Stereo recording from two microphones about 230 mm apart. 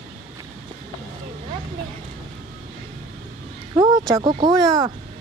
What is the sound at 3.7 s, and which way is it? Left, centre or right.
Speech, centre.